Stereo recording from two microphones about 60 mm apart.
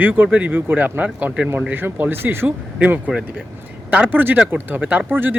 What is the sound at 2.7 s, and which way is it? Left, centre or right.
A man's voice, right.